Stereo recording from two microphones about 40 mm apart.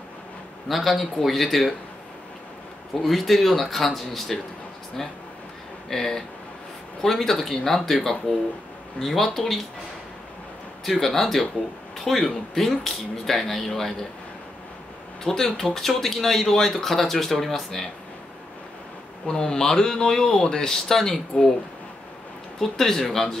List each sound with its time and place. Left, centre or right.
0.7 s speech: centre
2.9 s speech: centre
5.9 s speech: centre
10.9 s speech: centre
15.2 s speech: centre
19.2 s speech: centre
21.3 s speech: left
22.6 s speech: centre